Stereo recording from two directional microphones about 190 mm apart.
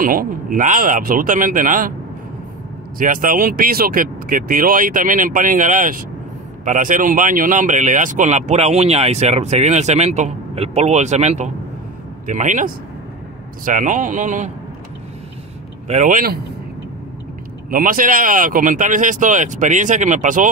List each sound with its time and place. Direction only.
0.0 s speech: 45° right (ahead or behind)
3.0 s speech: 45° right (ahead or behind)
15.9 s speech: 40° right (ahead or behind)
17.6 s speech: 45° right (ahead or behind)